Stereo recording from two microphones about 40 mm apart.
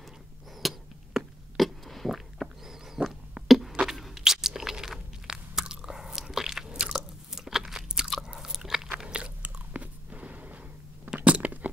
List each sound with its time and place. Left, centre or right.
0.6 s chop: centre
1.1 s a sound: centre
1.6 s fart: centre
2.0 s a sound: centre
4.2 s chewing: centre
7.0 s crunch: centre
8.4 s biting: centre
8.9 s biting: right
11.2 s a sound: right